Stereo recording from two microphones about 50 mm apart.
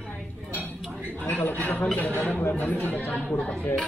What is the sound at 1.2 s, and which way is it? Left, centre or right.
Speech, left.